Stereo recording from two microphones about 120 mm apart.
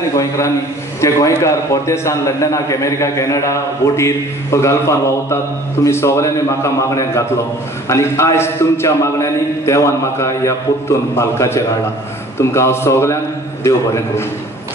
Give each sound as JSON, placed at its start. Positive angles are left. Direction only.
{"t": 0.1, "sound": "a man's voice", "side_deg": 25}